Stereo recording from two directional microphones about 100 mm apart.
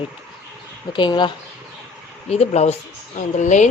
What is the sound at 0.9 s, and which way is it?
Speech, 50° left (ahead or behind).